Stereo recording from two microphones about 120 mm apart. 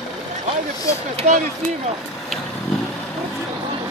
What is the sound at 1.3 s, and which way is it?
Speech, 65° right (ahead or behind).